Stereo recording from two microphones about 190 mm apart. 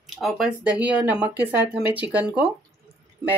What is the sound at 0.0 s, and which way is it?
Speech, centre (ahead or behind).